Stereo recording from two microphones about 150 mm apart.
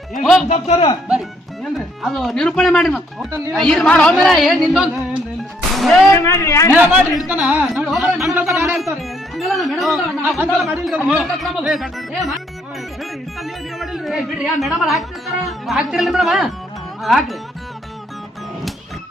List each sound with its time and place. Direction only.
0.1 s speech: centre (ahead or behind)
0.4 s a man's voice: 45° left (ahead or behind)
2.0 s speech: centre (ahead or behind)
5.7 s music: centre (ahead or behind)
6.0 s a man's voice: 15° left (ahead or behind)
6.7 s speech: 10° right (ahead or behind)
8.2 s speech: 20° right (ahead or behind)
9.3 s speech: centre (ahead or behind)
10.2 s speech: 15° right (ahead or behind)
10.6 s speech: centre (ahead or behind)